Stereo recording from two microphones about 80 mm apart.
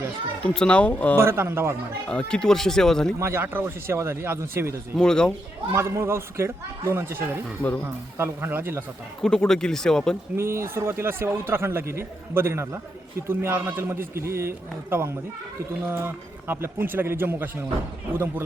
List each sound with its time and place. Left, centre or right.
0.4 s speech: centre
1.1 s speech: right
2.0 s speech: centre
3.2 s speech: right
4.9 s speech: centre
5.7 s speech: right
9.2 s speech: centre
10.3 s speech: right